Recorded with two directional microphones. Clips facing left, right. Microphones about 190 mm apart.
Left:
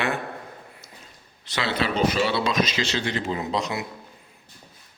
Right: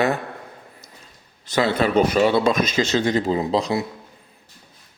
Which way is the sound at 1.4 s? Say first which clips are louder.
Right 7 dB; 45° right (ahead or behind).